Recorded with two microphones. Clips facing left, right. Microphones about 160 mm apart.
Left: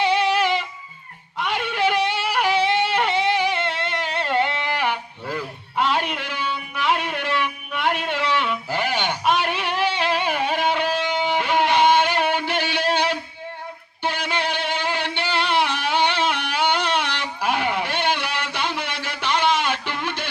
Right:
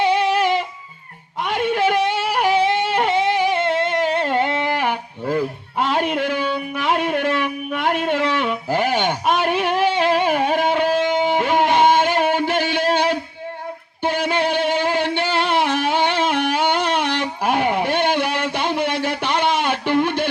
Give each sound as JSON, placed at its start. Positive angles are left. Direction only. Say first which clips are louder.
{"t": 0.0, "sound": "music", "louder": "right 2 dB", "side_deg": -50}
{"t": 1.4, "sound": "a sound", "louder": "right 4 dB", "side_deg": -45}
{"t": 14.0, "sound": "music", "louder": "right 5 dB", "side_deg": -50}